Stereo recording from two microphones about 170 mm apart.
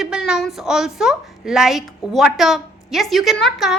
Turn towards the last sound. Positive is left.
turn(degrees=0)  # may be behind; listen again after turning